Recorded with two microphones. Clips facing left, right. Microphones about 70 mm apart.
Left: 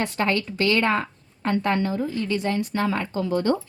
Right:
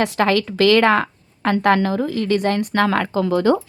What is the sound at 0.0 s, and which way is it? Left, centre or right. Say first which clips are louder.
A woman's voice: right 6 dB; right.